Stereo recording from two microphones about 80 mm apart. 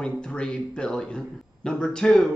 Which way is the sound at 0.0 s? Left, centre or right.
Centre.